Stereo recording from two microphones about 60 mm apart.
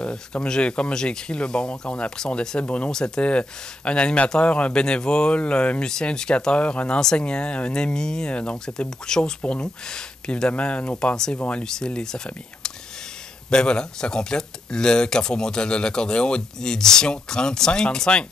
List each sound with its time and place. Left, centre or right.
0.0 s speech: centre
13.5 s speech: centre